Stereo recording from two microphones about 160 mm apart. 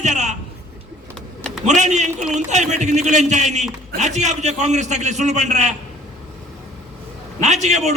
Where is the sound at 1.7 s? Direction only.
45° right (ahead or behind).